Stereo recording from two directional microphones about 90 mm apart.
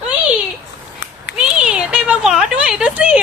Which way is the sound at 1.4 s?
10° right (ahead or behind).